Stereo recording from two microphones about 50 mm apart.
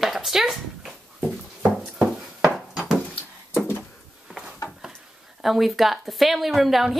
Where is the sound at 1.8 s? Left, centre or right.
Centre.